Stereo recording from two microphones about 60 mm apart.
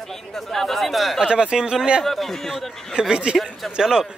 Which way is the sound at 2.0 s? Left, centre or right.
Centre.